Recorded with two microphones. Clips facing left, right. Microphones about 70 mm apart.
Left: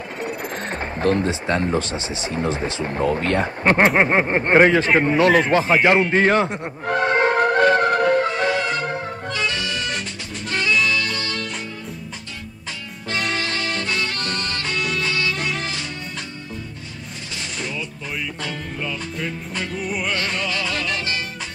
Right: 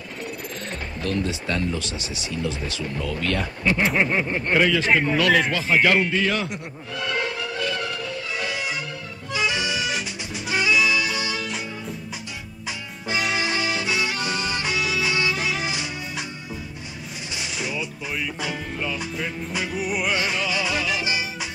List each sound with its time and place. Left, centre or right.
0.4 s bird: left
1.7 s speech: left
3.6 s speech: left
5.8 s speech: left
6.0 s speech: left
6.9 s music: left
9.3 s music: centre
13.1 s music: centre
17.4 s music: centre